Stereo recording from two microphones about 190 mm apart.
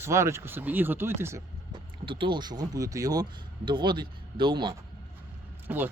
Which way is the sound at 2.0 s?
25° right (ahead or behind).